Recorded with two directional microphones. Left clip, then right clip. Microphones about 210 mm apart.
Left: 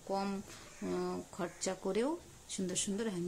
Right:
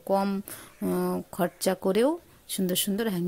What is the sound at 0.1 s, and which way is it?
Speech, 45° right (ahead or behind).